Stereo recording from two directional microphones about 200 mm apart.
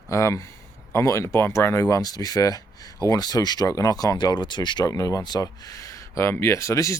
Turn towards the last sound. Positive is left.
turn(degrees=15)  # may be behind; listen again after turning